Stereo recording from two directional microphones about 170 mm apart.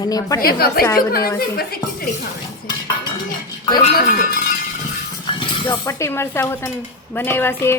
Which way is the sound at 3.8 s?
50° left (ahead or behind).